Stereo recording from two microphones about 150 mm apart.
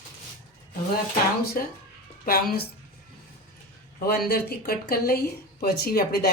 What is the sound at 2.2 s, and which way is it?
Speech, 85° left.